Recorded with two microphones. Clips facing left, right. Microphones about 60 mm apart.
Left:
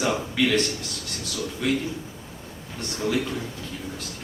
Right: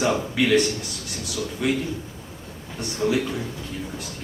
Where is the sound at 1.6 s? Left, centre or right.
Centre.